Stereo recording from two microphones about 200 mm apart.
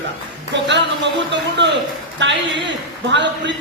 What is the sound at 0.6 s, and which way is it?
Speech, 60° right (ahead or behind).